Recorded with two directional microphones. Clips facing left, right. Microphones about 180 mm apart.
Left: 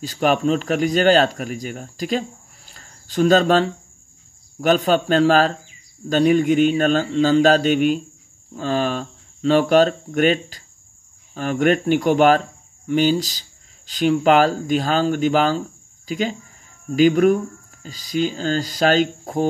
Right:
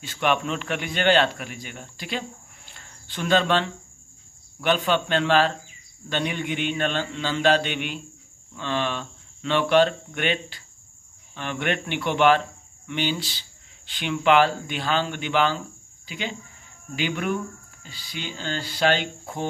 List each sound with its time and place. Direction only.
0.0 s speech: 40° left (ahead or behind)